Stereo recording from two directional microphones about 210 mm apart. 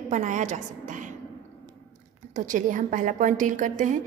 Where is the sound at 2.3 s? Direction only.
35° right (ahead or behind).